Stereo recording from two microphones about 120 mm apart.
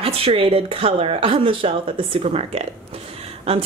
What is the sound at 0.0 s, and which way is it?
Speech, 55° right (ahead or behind).